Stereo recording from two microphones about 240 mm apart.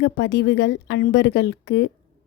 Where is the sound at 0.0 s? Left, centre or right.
Left.